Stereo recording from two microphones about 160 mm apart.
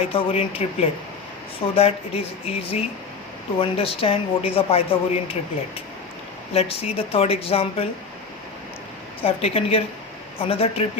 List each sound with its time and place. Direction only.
0.0 s speech: 35° left (ahead or behind)
6.5 s speech: 40° left (ahead or behind)
9.2 s speech: 35° left (ahead or behind)